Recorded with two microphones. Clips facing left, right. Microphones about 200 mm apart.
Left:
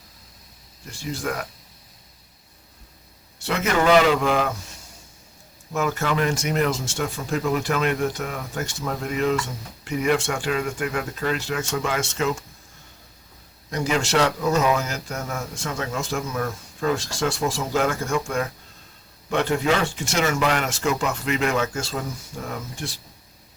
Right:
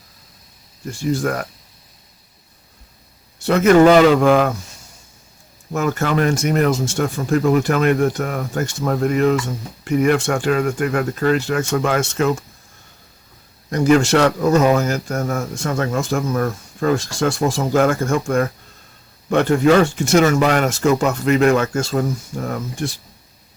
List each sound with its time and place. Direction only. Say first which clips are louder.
0.9 s speech: right 8 dB; 45° right (ahead or behind)
3.4 s speech: right 10 dB; 45° right (ahead or behind)
5.7 s speech: right 5 dB; 50° right (ahead or behind)
13.7 s speech: right 10 dB; 50° right (ahead or behind)